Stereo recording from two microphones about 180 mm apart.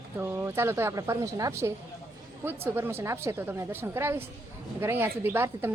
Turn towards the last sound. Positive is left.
turn(degrees=-15)  # may be behind; listen again after turning